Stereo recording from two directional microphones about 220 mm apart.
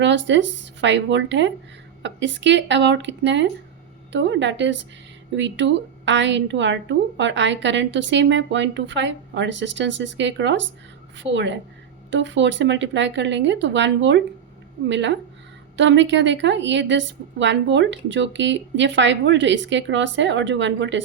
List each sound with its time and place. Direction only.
0.0 s a woman's voice: 55° right (ahead or behind)